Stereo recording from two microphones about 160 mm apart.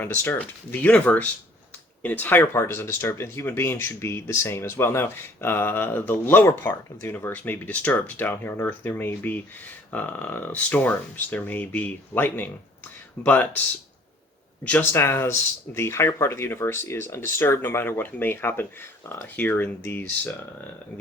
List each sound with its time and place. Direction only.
0.0 s speech: 10° left (ahead or behind)
14.6 s speech: 10° left (ahead or behind)